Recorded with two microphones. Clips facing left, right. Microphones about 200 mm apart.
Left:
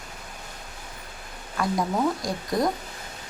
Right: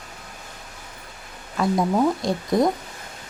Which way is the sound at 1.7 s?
25° right (ahead or behind).